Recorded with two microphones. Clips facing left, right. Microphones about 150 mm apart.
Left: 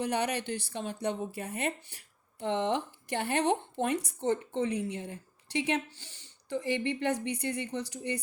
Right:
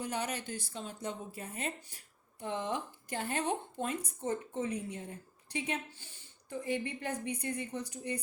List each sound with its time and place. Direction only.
0.0 s speech: 70° left (ahead or behind)